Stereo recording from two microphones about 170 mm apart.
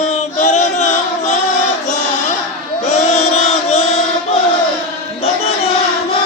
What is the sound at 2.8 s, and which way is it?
Chant, 40° left (ahead or behind).